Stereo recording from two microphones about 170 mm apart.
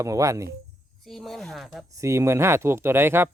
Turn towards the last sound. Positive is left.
turn(degrees=-15)  # may be behind; listen again after turning